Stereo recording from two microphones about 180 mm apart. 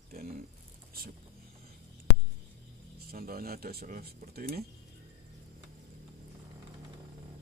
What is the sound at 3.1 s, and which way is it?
Speech, 55° right (ahead or behind).